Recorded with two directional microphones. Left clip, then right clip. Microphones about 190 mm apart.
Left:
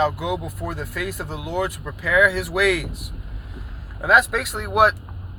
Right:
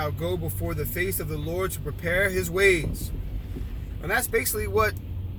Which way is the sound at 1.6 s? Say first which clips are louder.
Left 7 dB; 15° right (ahead or behind).